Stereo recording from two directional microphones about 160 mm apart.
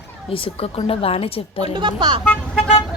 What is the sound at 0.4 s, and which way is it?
A woman's voice, 35° left (ahead or behind).